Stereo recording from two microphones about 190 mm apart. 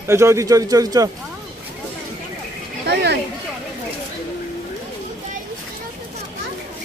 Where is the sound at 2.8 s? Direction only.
60° right (ahead or behind).